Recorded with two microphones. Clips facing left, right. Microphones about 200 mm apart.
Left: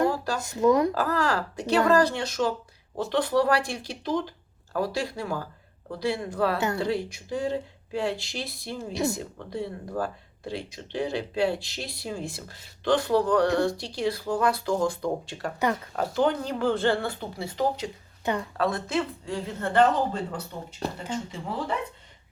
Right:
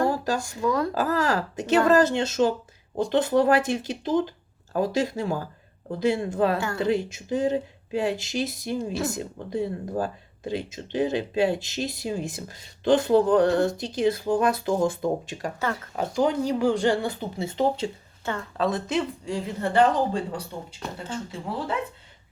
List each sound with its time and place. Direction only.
0.3 s speech: 20° left (ahead or behind)
0.9 s speech: 20° right (ahead or behind)
15.5 s speech: 15° left (ahead or behind)
16.0 s speech: 10° right (ahead or behind)
20.8 s speech: 35° left (ahead or behind)